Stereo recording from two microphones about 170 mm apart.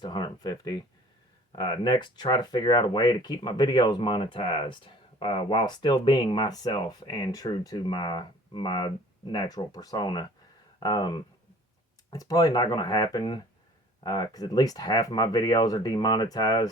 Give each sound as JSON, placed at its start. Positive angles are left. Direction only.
{"t": 0.0, "sound": "speech", "side_deg": 25}